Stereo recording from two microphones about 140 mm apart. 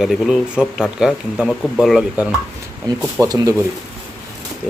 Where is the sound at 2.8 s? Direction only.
25° right (ahead or behind).